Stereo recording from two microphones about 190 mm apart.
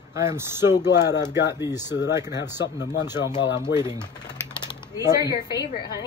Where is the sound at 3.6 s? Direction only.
15° right (ahead or behind).